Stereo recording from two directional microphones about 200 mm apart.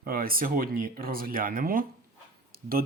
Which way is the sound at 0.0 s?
45° right (ahead or behind).